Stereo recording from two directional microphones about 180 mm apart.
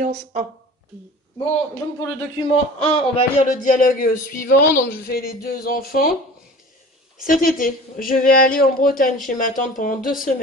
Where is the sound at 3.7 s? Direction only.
50° left (ahead or behind).